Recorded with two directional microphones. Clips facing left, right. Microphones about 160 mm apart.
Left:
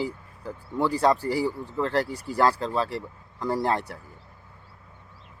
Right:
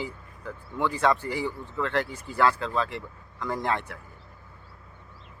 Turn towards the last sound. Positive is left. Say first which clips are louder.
# left 3 dB
turn(degrees=35)  # may be behind; listen again after turning